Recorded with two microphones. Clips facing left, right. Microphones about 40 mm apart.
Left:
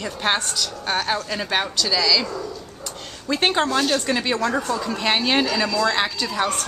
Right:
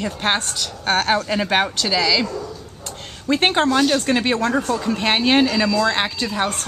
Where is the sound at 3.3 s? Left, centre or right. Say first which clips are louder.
Right 3 dB; right.